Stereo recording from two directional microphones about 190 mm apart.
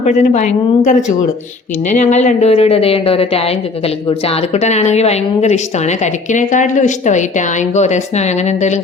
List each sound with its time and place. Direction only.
0.0 s a woman's voice: 40° left (ahead or behind)